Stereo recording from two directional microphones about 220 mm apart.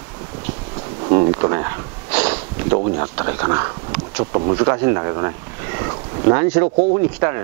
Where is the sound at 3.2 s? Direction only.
20° right (ahead or behind).